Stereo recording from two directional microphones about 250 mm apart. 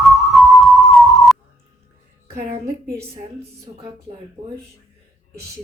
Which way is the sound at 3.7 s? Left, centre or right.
Right.